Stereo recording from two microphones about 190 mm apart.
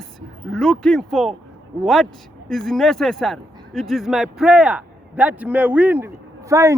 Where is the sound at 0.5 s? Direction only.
5° left (ahead or behind).